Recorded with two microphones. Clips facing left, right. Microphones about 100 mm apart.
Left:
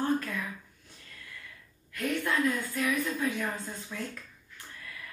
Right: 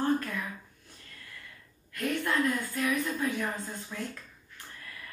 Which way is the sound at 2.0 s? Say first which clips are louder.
Even; 30° right (ahead or behind).